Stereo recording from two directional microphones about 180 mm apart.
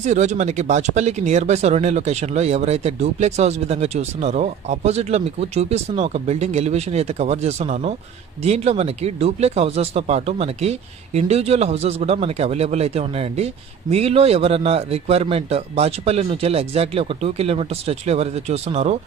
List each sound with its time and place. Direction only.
0.0 s speech: 40° right (ahead or behind)